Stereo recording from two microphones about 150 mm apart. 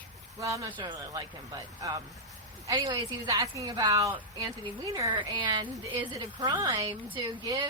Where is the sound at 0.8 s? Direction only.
30° right (ahead or behind).